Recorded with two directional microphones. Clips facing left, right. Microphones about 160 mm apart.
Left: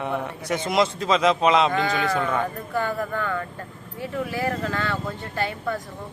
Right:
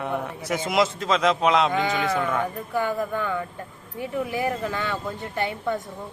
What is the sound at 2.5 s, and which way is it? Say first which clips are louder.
Speech: right 1 dB; 15° right (ahead or behind).